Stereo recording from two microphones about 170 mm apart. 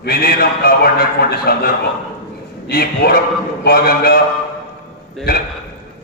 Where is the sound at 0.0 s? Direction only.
65° left (ahead or behind).